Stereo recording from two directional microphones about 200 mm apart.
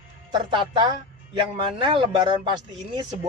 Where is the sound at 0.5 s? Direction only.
25° right (ahead or behind).